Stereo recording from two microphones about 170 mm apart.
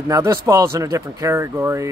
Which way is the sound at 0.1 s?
20° right (ahead or behind).